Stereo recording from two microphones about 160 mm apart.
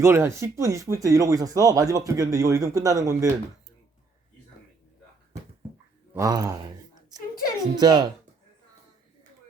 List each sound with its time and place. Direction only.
0.0 s speech: 15° right (ahead or behind)
6.1 s speech: 20° right (ahead or behind)
7.1 s a sound: 25° right (ahead or behind)
7.8 s speech: 25° right (ahead or behind)